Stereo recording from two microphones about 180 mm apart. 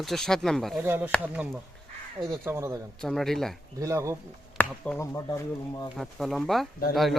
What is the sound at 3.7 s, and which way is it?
Speech, 15° right (ahead or behind).